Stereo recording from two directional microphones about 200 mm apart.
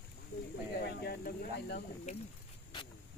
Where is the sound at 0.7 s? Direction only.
50° left (ahead or behind).